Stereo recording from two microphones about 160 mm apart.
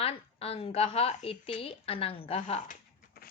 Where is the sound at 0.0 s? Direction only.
40° left (ahead or behind).